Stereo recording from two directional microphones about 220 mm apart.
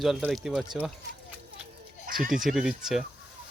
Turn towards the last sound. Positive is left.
turn(degrees=0)  # may be behind; listen again after turning